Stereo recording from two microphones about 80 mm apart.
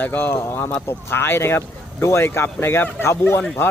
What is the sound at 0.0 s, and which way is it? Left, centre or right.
Speech, left.